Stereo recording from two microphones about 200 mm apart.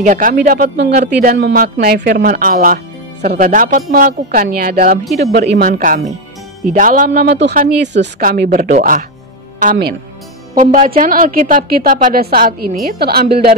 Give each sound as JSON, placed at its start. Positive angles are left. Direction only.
{"t": 0.0, "sound": "a woman's voice", "side_deg": -40}